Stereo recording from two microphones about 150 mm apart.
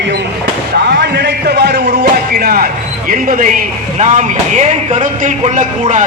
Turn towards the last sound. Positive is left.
turn(degrees=-55)  # may be behind; listen again after turning